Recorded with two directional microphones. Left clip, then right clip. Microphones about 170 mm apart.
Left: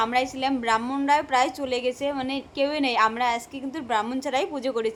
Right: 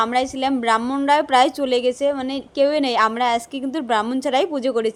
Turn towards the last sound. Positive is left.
turn(degrees=-25)  # may be behind; listen again after turning